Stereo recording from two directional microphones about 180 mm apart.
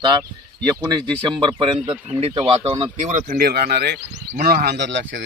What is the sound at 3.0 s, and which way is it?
Speech, 40° right (ahead or behind).